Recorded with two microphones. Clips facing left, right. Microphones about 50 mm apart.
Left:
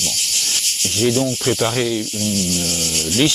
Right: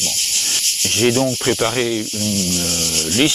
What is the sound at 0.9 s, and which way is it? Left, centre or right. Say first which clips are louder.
Speech: right 2 dB; right.